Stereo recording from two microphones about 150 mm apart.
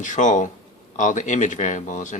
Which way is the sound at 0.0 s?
55° left (ahead or behind).